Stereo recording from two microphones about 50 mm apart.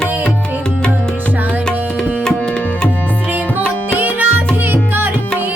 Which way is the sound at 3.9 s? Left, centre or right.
Right.